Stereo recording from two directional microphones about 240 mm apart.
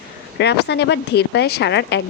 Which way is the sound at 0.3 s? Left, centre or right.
Left.